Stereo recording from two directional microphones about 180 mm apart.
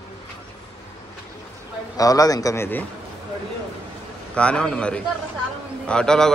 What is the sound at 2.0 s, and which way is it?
Speech, 20° left (ahead or behind).